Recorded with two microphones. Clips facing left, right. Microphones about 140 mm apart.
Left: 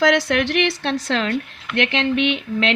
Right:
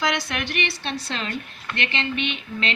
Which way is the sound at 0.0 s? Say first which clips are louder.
Left 9 dB; 85° left.